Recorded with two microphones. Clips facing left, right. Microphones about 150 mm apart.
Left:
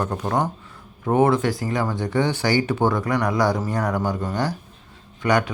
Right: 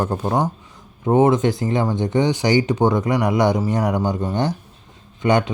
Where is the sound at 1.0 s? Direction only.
20° right (ahead or behind).